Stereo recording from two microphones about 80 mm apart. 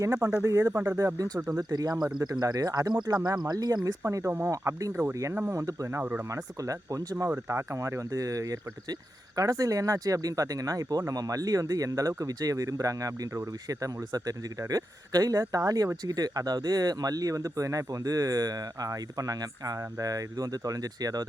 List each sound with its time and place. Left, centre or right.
0.0 s speech: right
0.9 s speech: right
4.4 s speech: right
5.5 s speech: right
6.0 s speech: right
6.3 s speech: right
7.3 s speech: right